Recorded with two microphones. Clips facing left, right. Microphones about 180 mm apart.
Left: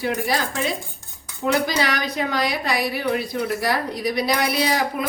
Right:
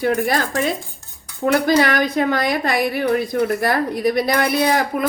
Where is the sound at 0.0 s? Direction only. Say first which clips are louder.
Right 4 dB; 50° right (ahead or behind).